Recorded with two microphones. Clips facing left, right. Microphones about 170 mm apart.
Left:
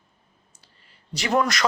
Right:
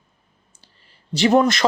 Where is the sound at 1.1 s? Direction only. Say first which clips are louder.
Right 7 dB; 25° right (ahead or behind).